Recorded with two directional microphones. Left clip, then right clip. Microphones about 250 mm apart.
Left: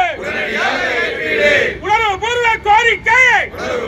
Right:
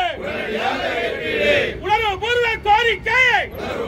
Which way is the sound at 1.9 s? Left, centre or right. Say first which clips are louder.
Left 3 dB; right.